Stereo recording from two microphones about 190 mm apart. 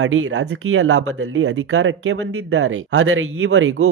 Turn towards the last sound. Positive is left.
turn(degrees=-90)